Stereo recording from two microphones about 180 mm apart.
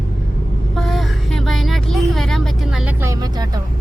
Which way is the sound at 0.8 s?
Centre (ahead or behind).